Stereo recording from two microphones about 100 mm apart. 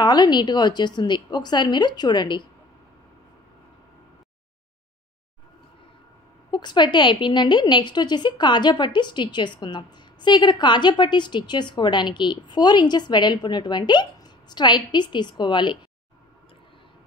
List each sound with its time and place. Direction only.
0.0 s a woman's voice: 45° left (ahead or behind)
6.5 s a woman's voice: 50° left (ahead or behind)